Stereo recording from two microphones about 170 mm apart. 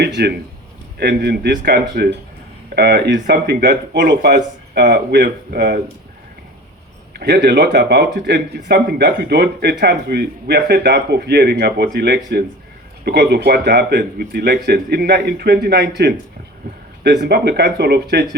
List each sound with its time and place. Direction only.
0.2 s speech: 70° right (ahead or behind)
7.1 s speech: 70° right (ahead or behind)
17.0 s speech: 75° right (ahead or behind)